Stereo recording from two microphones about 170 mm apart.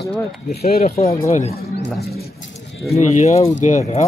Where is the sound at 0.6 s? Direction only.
65° left (ahead or behind).